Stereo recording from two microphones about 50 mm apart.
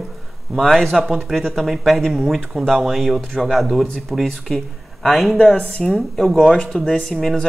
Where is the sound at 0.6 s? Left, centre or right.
Centre.